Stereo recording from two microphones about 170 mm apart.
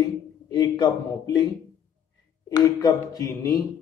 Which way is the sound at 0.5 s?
25° left (ahead or behind).